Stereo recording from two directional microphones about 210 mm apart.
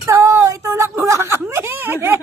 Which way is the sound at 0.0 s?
15° right (ahead or behind).